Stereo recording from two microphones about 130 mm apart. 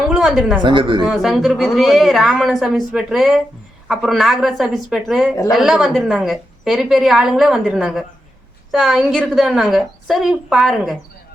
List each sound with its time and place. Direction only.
0.1 s speech: centre (ahead or behind)
0.6 s speech: 40° right (ahead or behind)
1.0 s a woman's voice: 5° right (ahead or behind)